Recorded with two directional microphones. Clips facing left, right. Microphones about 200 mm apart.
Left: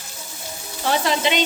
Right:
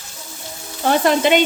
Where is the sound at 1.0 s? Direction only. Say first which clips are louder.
Right 9 dB; 50° right (ahead or behind).